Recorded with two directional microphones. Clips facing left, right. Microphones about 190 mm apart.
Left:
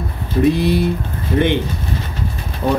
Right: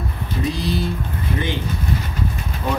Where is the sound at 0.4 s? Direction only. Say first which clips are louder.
Left 9 dB; 55° left (ahead or behind).